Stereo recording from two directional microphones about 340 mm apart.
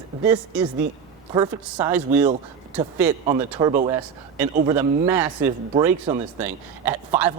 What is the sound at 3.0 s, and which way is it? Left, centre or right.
Speech, centre.